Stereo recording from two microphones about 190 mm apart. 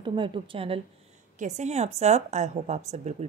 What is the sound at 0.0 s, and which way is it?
A woman's voice, 25° right (ahead or behind).